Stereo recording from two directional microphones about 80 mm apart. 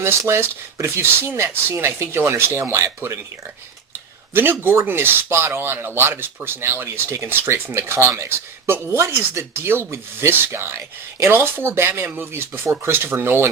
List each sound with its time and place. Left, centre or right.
0.0 s speech: right
4.6 s speech: right